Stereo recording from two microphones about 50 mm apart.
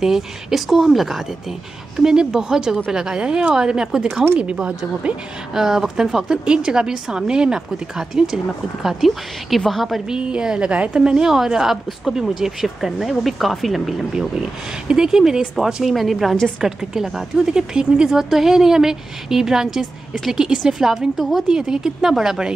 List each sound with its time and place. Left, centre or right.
0.0 s a woman's voice: centre
10.0 s a woman's voice: centre
14.9 s a woman's voice: centre
21.5 s a woman's voice: centre